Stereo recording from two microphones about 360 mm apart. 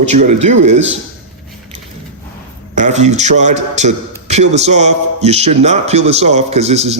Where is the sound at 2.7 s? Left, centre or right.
Centre.